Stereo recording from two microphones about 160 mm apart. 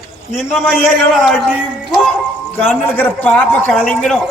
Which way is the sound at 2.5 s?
10° left (ahead or behind).